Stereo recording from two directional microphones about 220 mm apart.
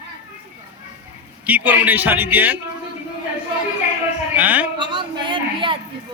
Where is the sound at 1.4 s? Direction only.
5° right (ahead or behind).